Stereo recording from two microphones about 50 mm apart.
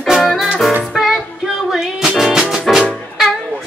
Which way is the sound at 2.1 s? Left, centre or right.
Centre.